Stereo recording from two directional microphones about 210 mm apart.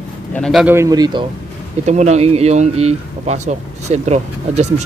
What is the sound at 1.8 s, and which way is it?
Speech, 35° right (ahead or behind).